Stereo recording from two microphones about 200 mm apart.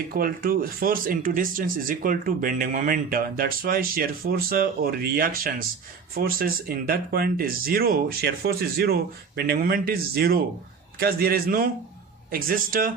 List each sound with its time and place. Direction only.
0.1 s speech: 45° right (ahead or behind)